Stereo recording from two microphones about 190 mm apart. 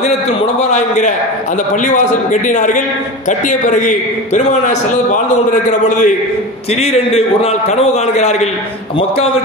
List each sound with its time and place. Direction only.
0.0 s a man's voice: 35° left (ahead or behind)
2.4 s a man's voice: 40° left (ahead or behind)